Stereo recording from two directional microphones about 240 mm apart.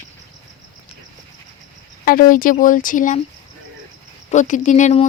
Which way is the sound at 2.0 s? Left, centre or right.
Left.